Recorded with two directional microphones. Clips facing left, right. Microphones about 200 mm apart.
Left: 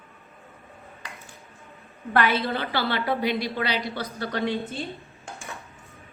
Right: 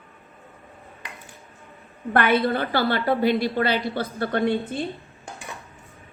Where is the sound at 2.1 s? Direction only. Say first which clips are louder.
Right 3 dB; 55° right (ahead or behind).